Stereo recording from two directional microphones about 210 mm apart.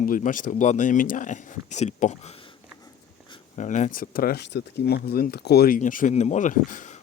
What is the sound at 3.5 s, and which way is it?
Speech, 35° left (ahead or behind).